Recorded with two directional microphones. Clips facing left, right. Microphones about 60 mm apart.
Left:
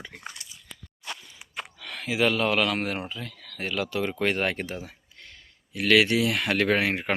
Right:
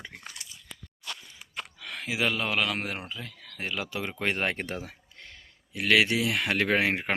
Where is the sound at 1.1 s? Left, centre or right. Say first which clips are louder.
Left 2 dB; left.